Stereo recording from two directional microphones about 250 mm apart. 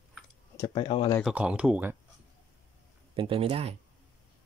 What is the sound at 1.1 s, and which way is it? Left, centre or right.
Speech, centre.